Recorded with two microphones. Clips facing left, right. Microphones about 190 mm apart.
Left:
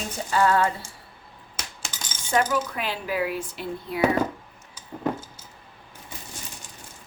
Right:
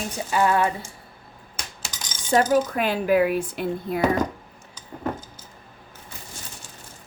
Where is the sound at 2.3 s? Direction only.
35° right (ahead or behind); by 4.0 s 55° right (ahead or behind).